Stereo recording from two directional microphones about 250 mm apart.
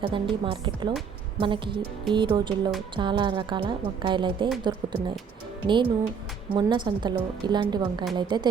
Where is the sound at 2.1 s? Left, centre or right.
Centre.